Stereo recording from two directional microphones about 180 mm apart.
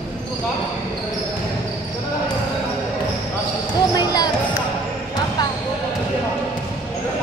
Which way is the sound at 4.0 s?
20° left (ahead or behind).